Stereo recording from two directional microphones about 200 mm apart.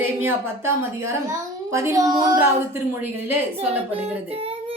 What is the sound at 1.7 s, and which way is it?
Child singing, 15° right (ahead or behind).